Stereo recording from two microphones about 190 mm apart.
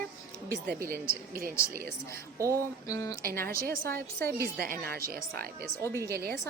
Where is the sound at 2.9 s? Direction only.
15° left (ahead or behind).